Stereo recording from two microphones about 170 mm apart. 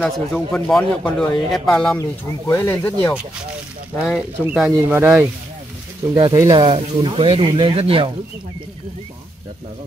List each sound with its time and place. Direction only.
0.0 s speech: 5° left (ahead or behind)
2.0 s speech: 20° left (ahead or behind)
4.0 s speech: centre (ahead or behind); by 8.1 s 35° right (ahead or behind)